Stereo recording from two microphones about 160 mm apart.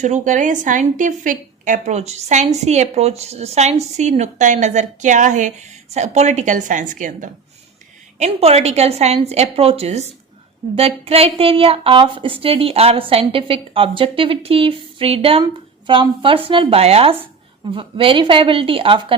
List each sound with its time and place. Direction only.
0.0 s a woman's voice: 50° right (ahead or behind)
8.2 s a woman's voice: 40° right (ahead or behind)